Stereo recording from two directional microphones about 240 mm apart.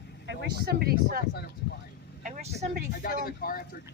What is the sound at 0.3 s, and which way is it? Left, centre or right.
Speech, right.